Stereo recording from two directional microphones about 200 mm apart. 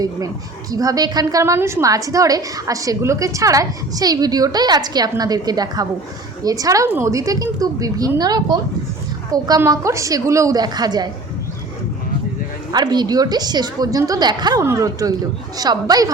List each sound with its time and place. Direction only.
0.7 s a woman's voice: 20° right (ahead or behind)
12.7 s a woman's voice: 20° right (ahead or behind)